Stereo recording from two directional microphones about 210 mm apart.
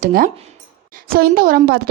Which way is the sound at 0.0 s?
45° right (ahead or behind).